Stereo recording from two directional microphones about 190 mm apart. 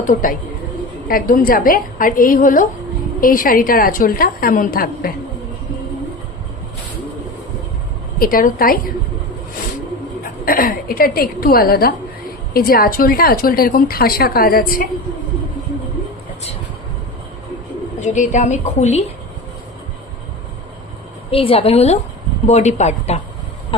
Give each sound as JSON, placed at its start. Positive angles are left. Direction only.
{"t": 0.0, "sound": "a woman's voice", "side_deg": 45}
{"t": 8.2, "sound": "a woman's voice", "side_deg": 50}
{"t": 10.4, "sound": "a woman's voice", "side_deg": 50}
{"t": 18.0, "sound": "a woman's voice", "side_deg": 40}
{"t": 21.2, "sound": "a woman's voice", "side_deg": 30}